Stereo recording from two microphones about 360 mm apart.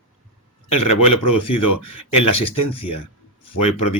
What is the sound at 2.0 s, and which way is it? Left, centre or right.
Speech, left.